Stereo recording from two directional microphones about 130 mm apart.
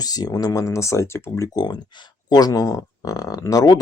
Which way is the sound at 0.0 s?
30° left (ahead or behind).